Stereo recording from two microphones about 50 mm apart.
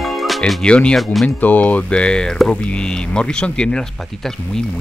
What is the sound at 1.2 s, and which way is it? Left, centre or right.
Speech, left.